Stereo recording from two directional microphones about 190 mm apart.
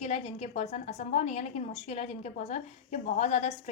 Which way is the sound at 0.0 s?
35° left (ahead or behind).